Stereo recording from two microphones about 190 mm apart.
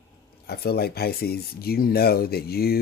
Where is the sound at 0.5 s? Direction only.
55° left (ahead or behind).